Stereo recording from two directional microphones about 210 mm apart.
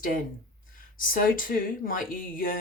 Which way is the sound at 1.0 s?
40° left (ahead or behind).